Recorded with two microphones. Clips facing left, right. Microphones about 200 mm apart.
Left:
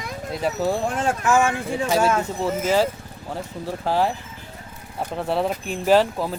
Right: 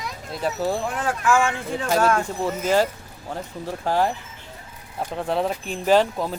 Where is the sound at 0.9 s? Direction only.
25° left (ahead or behind).